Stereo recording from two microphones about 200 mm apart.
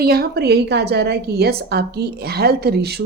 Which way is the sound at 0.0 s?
50° right (ahead or behind).